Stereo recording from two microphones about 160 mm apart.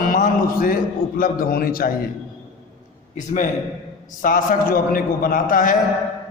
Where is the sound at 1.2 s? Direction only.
65° left (ahead or behind).